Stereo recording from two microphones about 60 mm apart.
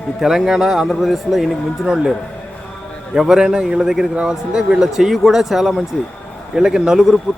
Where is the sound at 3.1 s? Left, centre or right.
Centre.